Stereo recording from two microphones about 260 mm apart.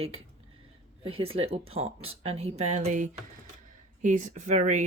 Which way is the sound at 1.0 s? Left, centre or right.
Right.